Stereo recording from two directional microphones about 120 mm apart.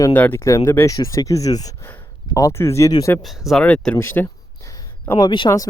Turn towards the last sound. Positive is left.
turn(degrees=35)  # may be behind; listen again after turning